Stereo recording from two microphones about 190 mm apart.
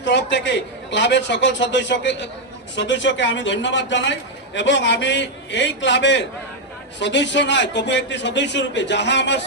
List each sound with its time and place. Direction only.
0.0 s a man's voice: 70° left (ahead or behind)